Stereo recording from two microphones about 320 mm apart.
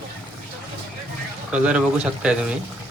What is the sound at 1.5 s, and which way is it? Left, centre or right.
Speech, centre.